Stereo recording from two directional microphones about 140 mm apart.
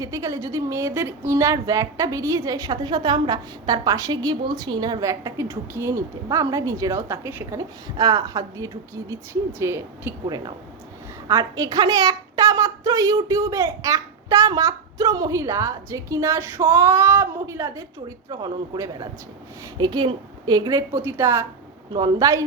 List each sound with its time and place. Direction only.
0.0 s a woman's voice: 25° right (ahead or behind)